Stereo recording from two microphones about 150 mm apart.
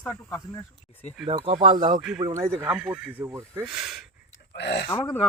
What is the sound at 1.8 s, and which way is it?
Speech, 50° right (ahead or behind).